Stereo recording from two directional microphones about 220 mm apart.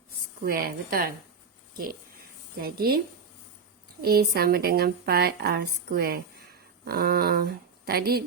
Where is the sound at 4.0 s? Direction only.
45° right (ahead or behind).